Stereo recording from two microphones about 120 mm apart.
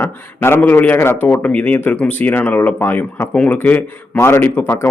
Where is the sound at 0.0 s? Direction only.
20° left (ahead or behind).